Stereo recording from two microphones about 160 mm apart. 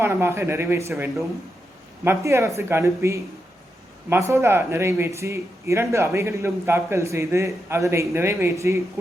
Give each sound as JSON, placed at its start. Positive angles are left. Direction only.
{"t": 0.0, "sound": "speech", "side_deg": -15}